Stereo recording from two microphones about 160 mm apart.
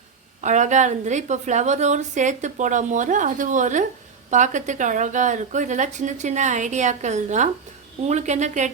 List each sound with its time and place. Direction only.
0.4 s a woman's voice: 50° right (ahead or behind)